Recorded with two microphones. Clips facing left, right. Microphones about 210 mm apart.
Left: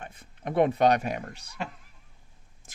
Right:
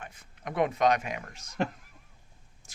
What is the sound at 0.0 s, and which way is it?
Speech, 30° left (ahead or behind).